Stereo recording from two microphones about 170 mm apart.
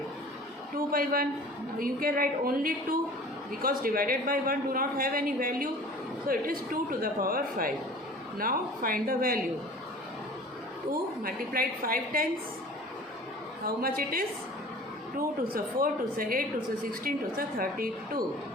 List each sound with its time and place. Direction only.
0.9 s a woman's voice: 60° right (ahead or behind)
11.2 s a man's voice: 60° right (ahead or behind)
13.7 s a man's voice: 60° right (ahead or behind)
15.4 s a man's voice: 60° right (ahead or behind)